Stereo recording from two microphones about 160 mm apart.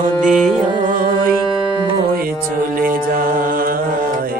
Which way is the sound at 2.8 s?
60° right (ahead or behind).